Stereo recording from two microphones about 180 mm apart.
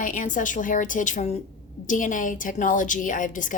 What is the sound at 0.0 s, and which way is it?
A woman's voice, 45° left (ahead or behind).